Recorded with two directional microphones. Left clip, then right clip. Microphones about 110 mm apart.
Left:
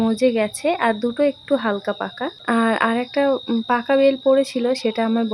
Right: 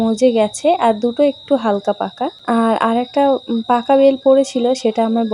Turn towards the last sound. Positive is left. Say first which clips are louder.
# right 4 dB
turn(degrees=-10)  # may be behind; listen again after turning